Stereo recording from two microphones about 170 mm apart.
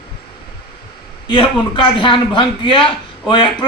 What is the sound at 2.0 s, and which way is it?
A man's voice, 30° left (ahead or behind).